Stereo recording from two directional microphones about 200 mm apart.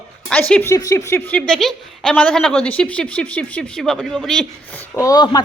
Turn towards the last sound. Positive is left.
turn(degrees=20)  # may be behind; listen again after turning